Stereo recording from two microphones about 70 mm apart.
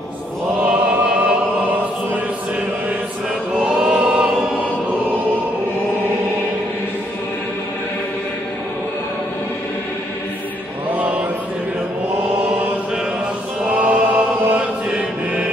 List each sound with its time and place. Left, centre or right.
0.7 s music: centre
3.6 s chant: centre
10.9 s chant: right
13.7 s music: centre